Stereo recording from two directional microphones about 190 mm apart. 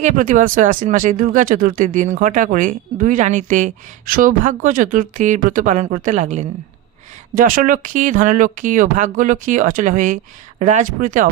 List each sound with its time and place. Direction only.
0.0 s speech: 40° right (ahead or behind)